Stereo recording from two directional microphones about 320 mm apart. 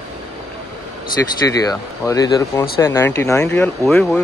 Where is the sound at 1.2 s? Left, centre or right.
Centre.